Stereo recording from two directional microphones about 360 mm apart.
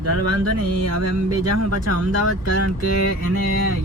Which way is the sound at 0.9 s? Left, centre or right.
Right.